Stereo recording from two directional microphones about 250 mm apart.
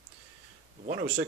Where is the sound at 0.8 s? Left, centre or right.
Right.